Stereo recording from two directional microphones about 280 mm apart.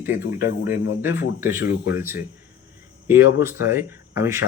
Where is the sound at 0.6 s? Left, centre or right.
Centre.